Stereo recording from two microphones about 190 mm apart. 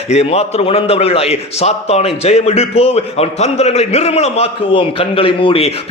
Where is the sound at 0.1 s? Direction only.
35° left (ahead or behind).